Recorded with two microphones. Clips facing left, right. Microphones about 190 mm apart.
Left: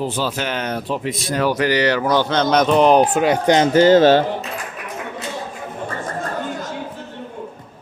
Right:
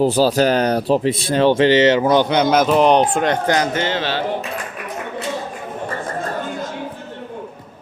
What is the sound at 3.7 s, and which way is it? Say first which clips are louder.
Speech: left 11 dB; 40° left (ahead or behind).